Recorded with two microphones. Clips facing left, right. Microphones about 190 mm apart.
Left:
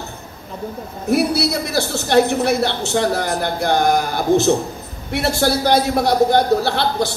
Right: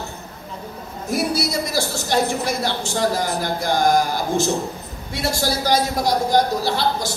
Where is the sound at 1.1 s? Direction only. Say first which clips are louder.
Left 5 dB; 65° left (ahead or behind).